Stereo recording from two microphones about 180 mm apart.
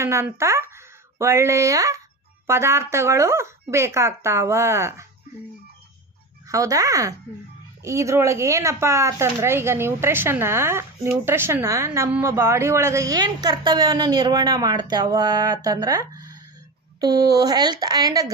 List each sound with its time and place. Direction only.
0.0 s speech: 15° right (ahead or behind)
6.5 s a woman's voice: 20° right (ahead or behind)